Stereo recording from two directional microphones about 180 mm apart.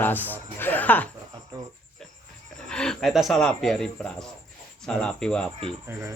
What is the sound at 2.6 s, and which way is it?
Speech, 5° left (ahead or behind).